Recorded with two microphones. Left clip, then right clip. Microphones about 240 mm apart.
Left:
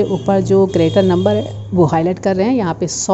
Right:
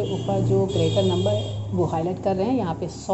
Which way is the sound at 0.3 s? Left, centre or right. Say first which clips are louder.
Left 10 dB; left.